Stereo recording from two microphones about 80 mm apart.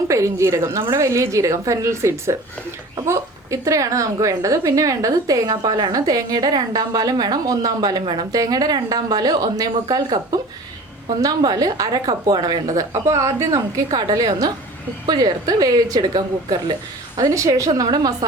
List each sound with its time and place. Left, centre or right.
0.1 s a woman's voice: right
17.7 s speech: right